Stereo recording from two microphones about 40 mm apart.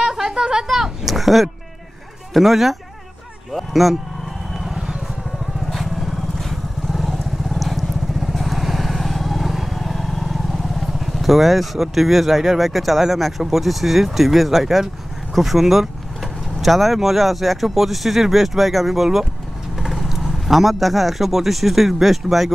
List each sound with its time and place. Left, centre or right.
0.0 s a sound: centre
0.7 s a sound: centre
2.3 s speech: centre
4.6 s vehicle: centre
5.7 s vehicle: centre
15.3 s speech: centre